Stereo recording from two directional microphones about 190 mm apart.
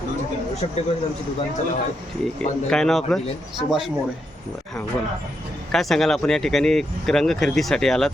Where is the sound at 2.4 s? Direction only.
5° left (ahead or behind).